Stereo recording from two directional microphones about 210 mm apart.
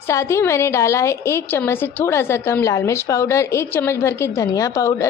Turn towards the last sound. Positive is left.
turn(degrees=15)  # may be behind; listen again after turning